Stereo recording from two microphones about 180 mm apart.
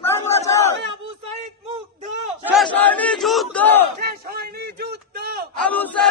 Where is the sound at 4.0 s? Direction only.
60° right (ahead or behind).